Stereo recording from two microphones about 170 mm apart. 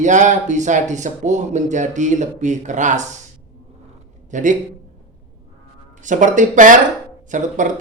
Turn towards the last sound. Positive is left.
turn(degrees=-50)  # may be behind; listen again after turning